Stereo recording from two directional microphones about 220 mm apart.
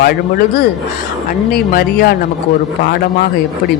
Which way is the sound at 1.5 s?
45° left (ahead or behind).